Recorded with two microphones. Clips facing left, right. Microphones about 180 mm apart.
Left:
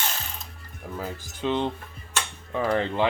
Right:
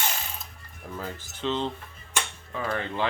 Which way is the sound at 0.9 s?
10° left (ahead or behind).